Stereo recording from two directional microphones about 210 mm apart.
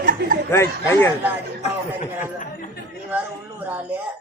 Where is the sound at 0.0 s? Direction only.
40° right (ahead or behind).